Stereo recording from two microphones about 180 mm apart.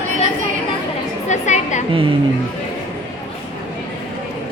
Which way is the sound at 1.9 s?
30° right (ahead or behind).